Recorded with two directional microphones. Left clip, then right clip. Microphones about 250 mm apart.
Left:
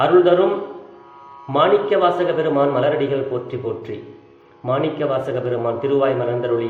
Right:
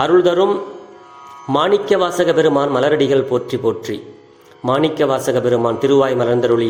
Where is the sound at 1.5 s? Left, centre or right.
Right.